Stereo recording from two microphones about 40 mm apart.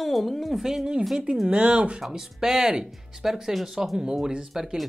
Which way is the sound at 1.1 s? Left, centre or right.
Centre.